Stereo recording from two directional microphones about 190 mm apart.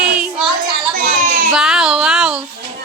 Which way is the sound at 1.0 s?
45° right (ahead or behind).